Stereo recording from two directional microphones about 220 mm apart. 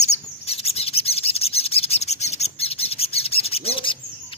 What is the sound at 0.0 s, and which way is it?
Bird, 30° left (ahead or behind).